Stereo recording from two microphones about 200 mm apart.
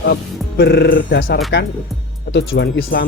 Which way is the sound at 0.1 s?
50° left (ahead or behind).